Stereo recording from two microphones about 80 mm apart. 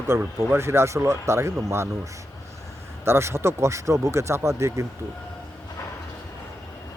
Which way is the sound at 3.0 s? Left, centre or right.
Right.